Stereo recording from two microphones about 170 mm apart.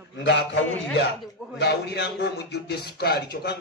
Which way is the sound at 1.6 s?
80° left.